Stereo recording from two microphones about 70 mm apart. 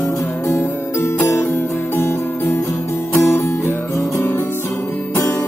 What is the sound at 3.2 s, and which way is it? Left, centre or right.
Music, left.